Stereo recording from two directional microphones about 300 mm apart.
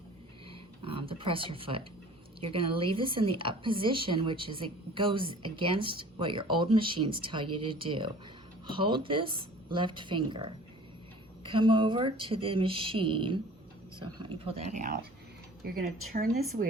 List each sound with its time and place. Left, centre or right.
0.8 s a woman's voice: centre
16.3 s speech: centre